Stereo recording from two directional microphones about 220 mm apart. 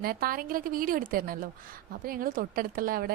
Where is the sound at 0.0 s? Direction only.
40° right (ahead or behind).